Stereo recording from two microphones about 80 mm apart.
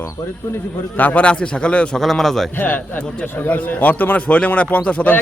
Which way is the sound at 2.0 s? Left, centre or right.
Centre.